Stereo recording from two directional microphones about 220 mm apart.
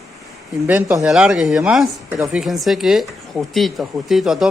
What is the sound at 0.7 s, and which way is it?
Speech, 10° right (ahead or behind).